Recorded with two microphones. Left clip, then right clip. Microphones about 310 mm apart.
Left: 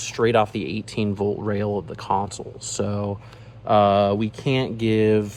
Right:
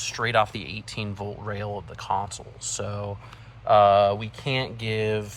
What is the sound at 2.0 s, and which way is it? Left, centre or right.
Speech, centre.